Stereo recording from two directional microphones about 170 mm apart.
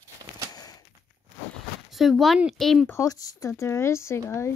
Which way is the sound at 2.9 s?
20° left (ahead or behind).